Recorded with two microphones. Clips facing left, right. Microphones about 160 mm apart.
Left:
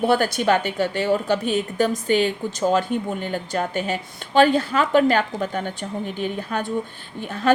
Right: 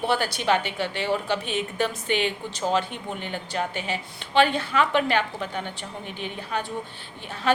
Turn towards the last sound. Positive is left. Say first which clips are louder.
# left 5 dB
turn(degrees=45)  # may be behind; listen again after turning